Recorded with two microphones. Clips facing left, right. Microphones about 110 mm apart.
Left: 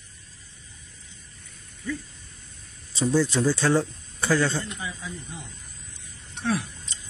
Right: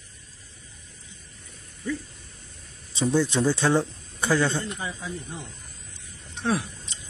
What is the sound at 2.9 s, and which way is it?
Speech, 15° right (ahead or behind).